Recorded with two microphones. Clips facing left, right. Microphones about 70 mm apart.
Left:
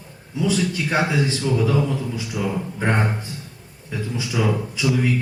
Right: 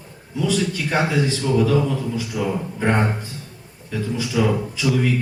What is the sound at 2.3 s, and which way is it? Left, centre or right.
Speech, centre.